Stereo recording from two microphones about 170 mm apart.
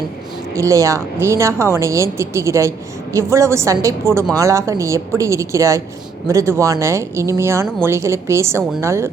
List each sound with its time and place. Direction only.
0.5 s a woman's voice: 20° right (ahead or behind)